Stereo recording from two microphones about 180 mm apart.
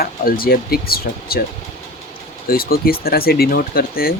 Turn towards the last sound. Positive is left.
turn(degrees=55)  # may be behind; listen again after turning